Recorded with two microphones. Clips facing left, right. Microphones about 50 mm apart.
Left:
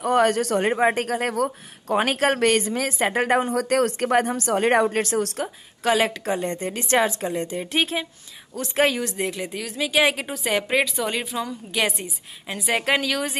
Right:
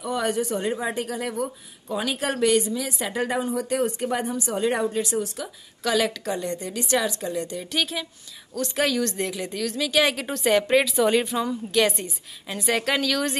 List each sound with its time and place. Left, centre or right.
0.0 s a woman's voice: left
5.4 s speech: left
9.0 s a woman's voice: centre
10.2 s a woman's voice: centre
11.7 s a woman's voice: centre